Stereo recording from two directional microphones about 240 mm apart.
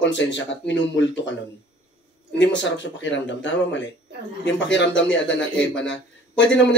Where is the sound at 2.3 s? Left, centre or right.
Left.